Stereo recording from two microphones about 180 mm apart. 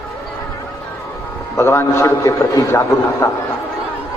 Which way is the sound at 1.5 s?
15° left (ahead or behind).